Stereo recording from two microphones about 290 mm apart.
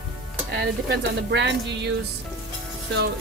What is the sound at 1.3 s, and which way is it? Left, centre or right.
Speech, right.